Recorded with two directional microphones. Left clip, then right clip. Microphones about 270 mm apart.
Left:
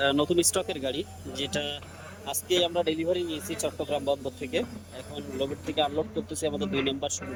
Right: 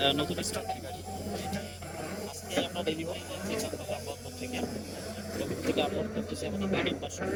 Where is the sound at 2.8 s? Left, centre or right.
Left.